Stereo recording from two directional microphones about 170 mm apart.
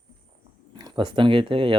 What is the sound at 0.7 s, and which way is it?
Speech, 25° right (ahead or behind).